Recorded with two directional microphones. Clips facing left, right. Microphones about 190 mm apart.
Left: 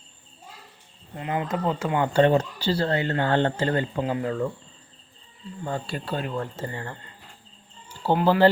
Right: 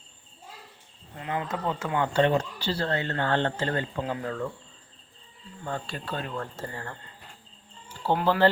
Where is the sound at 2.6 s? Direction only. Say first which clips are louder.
Left 5 dB; 35° left (ahead or behind).